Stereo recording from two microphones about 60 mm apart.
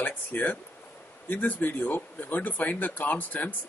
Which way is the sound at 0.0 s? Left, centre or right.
Left.